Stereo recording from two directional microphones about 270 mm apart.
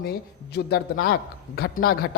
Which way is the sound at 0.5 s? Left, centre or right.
Left.